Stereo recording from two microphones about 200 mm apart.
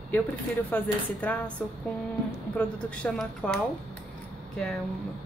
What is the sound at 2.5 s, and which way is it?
Speech, 5° left (ahead or behind).